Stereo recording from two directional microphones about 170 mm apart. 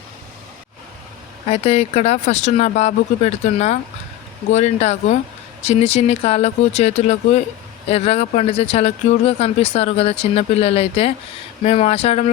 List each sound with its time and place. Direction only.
1.5 s speech: 35° left (ahead or behind)